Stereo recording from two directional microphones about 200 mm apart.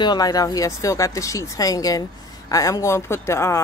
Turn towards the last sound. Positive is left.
turn(degrees=15)  # may be behind; listen again after turning